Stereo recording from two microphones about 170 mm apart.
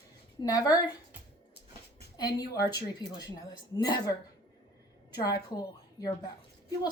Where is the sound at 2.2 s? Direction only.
25° left (ahead or behind).